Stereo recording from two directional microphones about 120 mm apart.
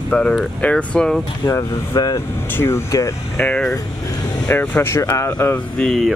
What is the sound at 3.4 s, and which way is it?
Speech, 5° left (ahead or behind).